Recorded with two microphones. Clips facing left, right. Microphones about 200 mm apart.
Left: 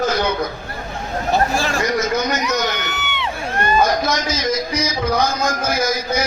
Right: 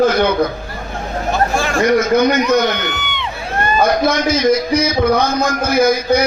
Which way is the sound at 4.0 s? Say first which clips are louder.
Right 6 dB; 60° right (ahead or behind).